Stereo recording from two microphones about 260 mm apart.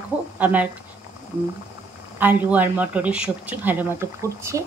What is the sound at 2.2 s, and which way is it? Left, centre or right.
Speech, centre.